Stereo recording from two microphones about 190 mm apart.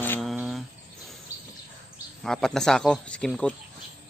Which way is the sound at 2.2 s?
Centre (ahead or behind).